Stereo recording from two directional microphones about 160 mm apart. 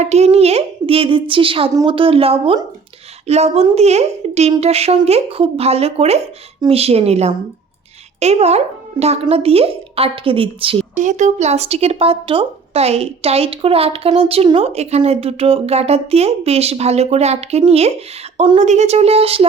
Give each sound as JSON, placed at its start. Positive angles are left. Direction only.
{"t": 0.0, "sound": "speech", "side_deg": -40}
{"t": 10.9, "sound": "speech", "side_deg": -50}